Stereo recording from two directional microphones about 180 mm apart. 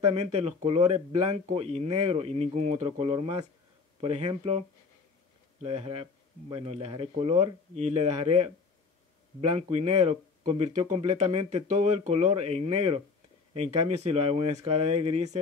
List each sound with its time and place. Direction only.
0.0 s speech: 35° right (ahead or behind)